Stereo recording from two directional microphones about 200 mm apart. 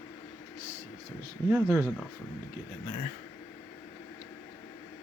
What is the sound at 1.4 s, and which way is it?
Speech, 10° right (ahead or behind).